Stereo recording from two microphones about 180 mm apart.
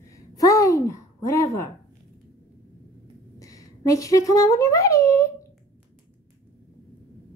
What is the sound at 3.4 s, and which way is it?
Speech, 20° left (ahead or behind).